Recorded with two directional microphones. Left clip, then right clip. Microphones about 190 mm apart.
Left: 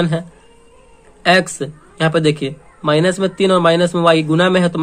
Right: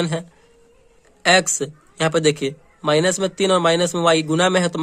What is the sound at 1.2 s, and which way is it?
A man's voice, 40° right (ahead or behind).